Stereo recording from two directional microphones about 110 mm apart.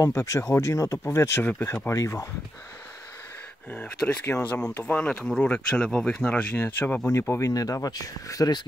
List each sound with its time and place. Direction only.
0.0 s speech: 30° left (ahead or behind)
3.7 s speech: 10° left (ahead or behind)
7.1 s speech: 25° left (ahead or behind)